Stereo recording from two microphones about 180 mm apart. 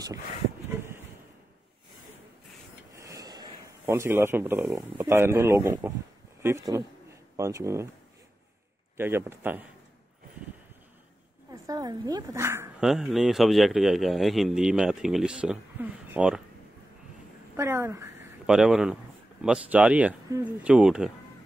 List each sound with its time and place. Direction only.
3.0 s a sound: 20° right (ahead or behind)
3.8 s a man's voice: 15° right (ahead or behind)
8.9 s speech: 15° right (ahead or behind)
11.5 s speech: 20° right (ahead or behind)
12.8 s a man's voice: centre (ahead or behind)
17.6 s speech: 15° right (ahead or behind)
18.5 s a man's voice: 5° right (ahead or behind)